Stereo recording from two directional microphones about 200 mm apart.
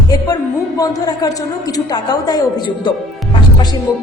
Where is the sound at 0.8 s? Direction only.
20° left (ahead or behind).